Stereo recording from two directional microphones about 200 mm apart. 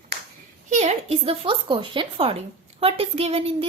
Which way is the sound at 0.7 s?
35° right (ahead or behind).